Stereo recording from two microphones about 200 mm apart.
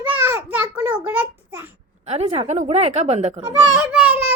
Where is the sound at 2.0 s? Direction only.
30° right (ahead or behind).